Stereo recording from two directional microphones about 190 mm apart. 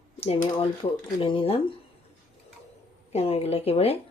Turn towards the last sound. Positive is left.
turn(degrees=30)  # may be behind; listen again after turning